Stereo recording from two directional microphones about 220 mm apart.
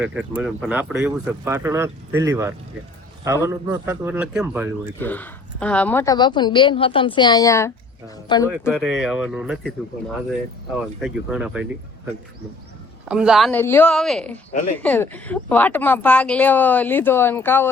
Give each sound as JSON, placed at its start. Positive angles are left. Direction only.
{"t": 0.0, "sound": "speech", "side_deg": -5}
{"t": 4.9, "sound": "speech", "side_deg": 10}
{"t": 8.7, "sound": "a woman's voice", "side_deg": -5}
{"t": 11.0, "sound": "a woman's voice", "side_deg": -5}
{"t": 13.1, "sound": "a woman's voice", "side_deg": -5}